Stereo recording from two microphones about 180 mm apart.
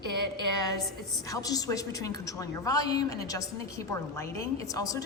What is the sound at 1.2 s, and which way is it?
A man's voice, 20° left (ahead or behind).